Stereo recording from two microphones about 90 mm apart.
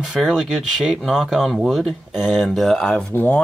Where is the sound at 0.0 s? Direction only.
10° right (ahead or behind).